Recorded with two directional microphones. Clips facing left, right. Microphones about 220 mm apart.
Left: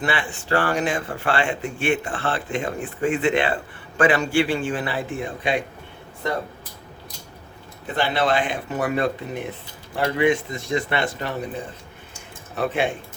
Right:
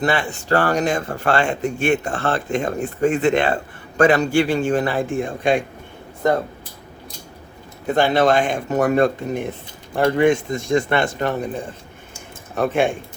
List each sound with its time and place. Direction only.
0.0 s speech: 40° right (ahead or behind)
7.9 s speech: 45° right (ahead or behind)